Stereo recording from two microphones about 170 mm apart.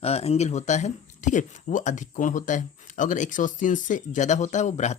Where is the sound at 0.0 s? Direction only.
35° left (ahead or behind).